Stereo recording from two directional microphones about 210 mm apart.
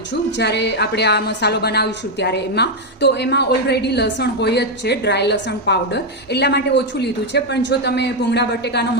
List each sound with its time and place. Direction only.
0.1 s a woman's voice: 55° left (ahead or behind)